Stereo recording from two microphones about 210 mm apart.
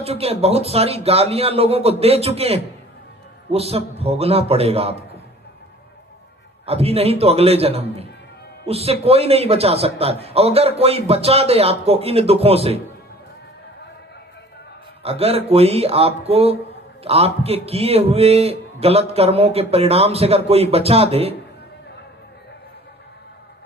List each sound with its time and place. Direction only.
0.0 s a man's voice: 30° right (ahead or behind)
6.7 s a man's voice: 30° right (ahead or behind)
15.0 s a man's voice: 30° right (ahead or behind)